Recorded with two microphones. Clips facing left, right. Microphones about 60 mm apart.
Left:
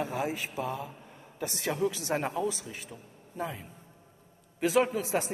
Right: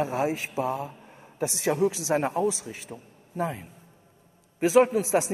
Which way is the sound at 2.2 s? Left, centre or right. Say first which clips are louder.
Right 6 dB; right.